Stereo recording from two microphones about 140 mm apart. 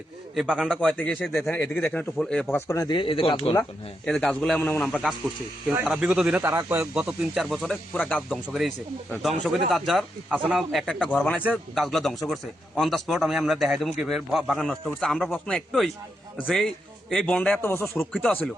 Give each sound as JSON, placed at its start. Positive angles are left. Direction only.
{"t": 0.3, "sound": "a man's voice", "side_deg": 5}
{"t": 2.6, "sound": "speech", "side_deg": 20}
{"t": 4.0, "sound": "a man's voice", "side_deg": 5}
{"t": 6.0, "sound": "speech", "side_deg": -5}
{"t": 6.4, "sound": "speech", "side_deg": -20}
{"t": 11.3, "sound": "a man's voice", "side_deg": -5}